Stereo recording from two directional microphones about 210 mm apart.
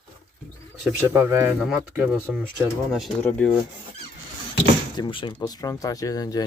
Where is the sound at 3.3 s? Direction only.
5° left (ahead or behind).